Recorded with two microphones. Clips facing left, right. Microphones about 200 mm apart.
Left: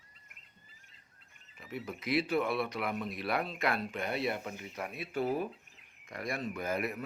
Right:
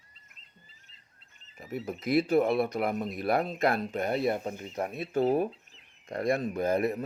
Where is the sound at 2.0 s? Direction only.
45° right (ahead or behind).